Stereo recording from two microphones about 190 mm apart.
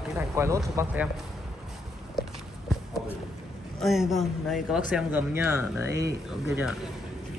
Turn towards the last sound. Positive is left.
turn(degrees=0)  # may be behind; listen again after turning